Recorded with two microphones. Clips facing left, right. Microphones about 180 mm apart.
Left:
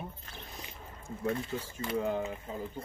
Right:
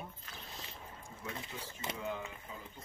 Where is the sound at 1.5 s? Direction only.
50° left (ahead or behind).